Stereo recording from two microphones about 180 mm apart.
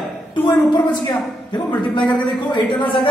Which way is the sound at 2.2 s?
25° left (ahead or behind).